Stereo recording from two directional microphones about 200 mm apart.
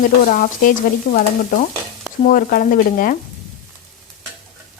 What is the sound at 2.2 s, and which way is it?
Stir, 45° left (ahead or behind).